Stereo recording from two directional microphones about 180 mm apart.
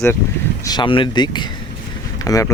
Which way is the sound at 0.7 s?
25° left (ahead or behind).